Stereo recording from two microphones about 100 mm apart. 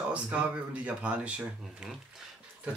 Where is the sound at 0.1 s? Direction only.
10° right (ahead or behind).